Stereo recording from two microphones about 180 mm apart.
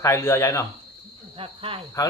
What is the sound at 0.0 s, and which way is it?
Speech, 15° left (ahead or behind).